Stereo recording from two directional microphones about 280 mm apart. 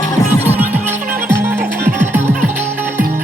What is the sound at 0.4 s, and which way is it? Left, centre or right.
Music, centre.